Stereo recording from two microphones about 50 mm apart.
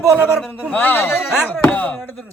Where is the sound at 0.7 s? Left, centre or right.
Left.